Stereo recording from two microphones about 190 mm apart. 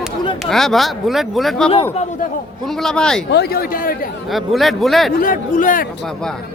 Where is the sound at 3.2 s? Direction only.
60° left (ahead or behind).